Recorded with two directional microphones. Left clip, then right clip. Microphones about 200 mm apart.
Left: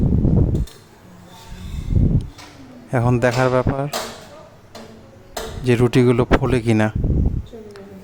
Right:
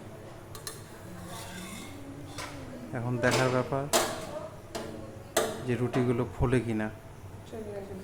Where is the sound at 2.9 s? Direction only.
55° left (ahead or behind).